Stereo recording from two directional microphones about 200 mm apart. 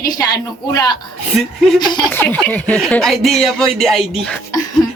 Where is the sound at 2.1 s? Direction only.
10° left (ahead or behind).